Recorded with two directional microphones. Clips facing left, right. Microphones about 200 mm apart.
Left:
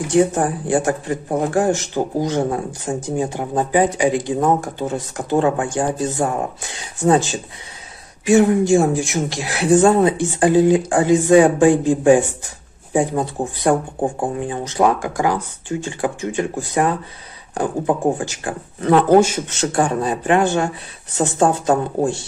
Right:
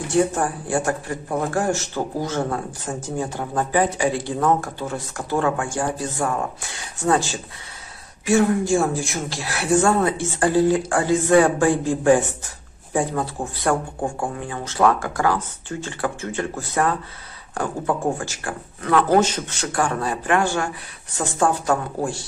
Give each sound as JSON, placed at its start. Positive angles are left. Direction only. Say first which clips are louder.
{"t": 0.1, "sound": "speech", "louder": "left 4 dB", "side_deg": 20}
{"t": 19.1, "sound": "speech", "louder": "left 5 dB", "side_deg": 10}
{"t": 19.5, "sound": "speech", "louder": "left 5 dB", "side_deg": 25}